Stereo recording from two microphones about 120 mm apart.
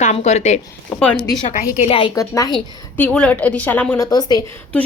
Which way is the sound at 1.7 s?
55° left (ahead or behind).